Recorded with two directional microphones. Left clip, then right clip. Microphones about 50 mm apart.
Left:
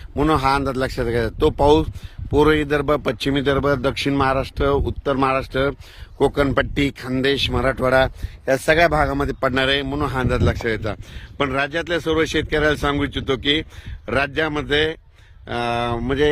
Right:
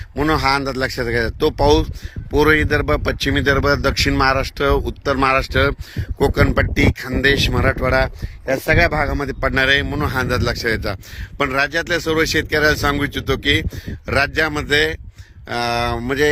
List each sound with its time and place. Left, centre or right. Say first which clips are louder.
0.2 s speech: right 1 dB; centre
0.6 s speech: right 1 dB; left
2.3 s speech: right 2 dB; centre
5.2 s speech: right 4 dB; right
6.0 s speech: right 1 dB; centre
6.5 s speech: right 2 dB; left
6.9 s speech: right 4 dB; centre
7.8 s speech: left 3 dB; left
8.7 s a man's voice: even; left
9.6 s speech: right 6 dB; centre